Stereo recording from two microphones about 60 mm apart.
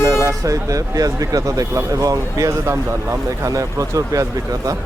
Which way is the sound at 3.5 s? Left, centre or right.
Right.